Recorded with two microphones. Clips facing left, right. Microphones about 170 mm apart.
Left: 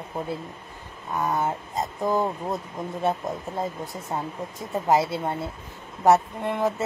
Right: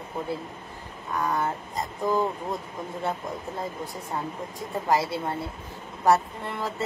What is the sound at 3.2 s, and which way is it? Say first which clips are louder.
Speech: left 3 dB; 25° left (ahead or behind).